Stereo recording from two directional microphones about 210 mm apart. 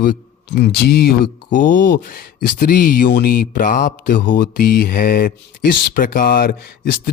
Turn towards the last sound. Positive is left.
turn(degrees=45)  # may be behind; listen again after turning